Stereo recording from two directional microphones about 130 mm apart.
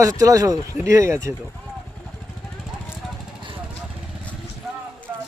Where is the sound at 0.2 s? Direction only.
25° right (ahead or behind).